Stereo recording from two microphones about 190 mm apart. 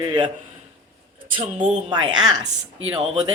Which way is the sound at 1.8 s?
25° right (ahead or behind).